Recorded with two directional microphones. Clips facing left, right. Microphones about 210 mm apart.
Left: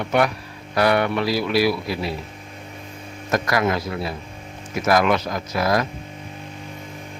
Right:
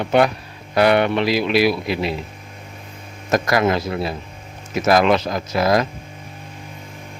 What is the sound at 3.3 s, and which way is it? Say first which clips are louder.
Speech: right 3 dB; 25° right (ahead or behind).